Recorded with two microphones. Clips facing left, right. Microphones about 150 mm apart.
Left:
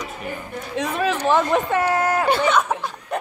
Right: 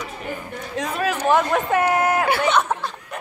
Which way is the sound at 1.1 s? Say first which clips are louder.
Right 1 dB; 15° right (ahead or behind).